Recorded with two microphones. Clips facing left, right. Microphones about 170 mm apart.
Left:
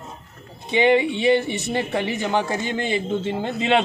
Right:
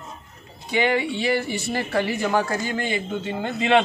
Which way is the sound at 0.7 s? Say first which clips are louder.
Left 4 dB; 25° left (ahead or behind).